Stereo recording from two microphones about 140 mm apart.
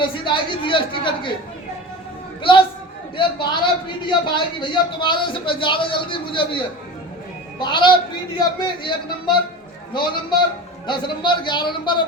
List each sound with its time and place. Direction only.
0.0 s a man's voice: 35° left (ahead or behind)
3.2 s a man's voice: 35° left (ahead or behind)